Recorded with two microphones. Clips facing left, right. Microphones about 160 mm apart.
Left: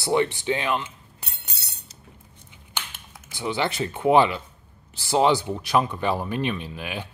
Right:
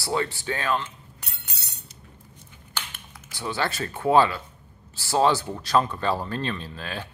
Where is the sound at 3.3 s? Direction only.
15° left (ahead or behind).